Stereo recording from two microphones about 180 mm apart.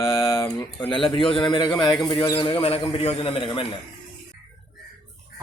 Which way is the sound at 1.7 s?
5° left (ahead or behind).